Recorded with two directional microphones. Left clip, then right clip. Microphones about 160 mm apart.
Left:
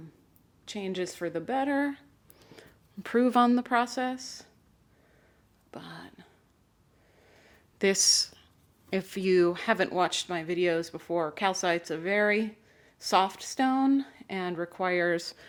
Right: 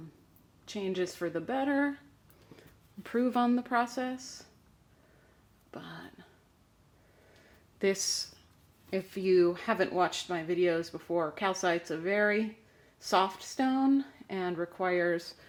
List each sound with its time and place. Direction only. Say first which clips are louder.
0.6 s a woman's voice: even; 15° left (ahead or behind)
5.7 s a sound: left 1 dB; 15° left (ahead or behind)
7.8 s speech: left 6 dB; 25° left (ahead or behind)